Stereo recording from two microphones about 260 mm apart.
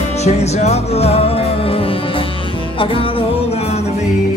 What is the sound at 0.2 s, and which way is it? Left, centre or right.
Music, left.